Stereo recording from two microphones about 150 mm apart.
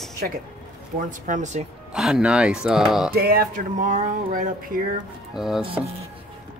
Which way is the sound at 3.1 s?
90° right.